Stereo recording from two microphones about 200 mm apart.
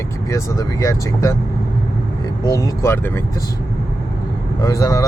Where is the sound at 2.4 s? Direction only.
15° left (ahead or behind).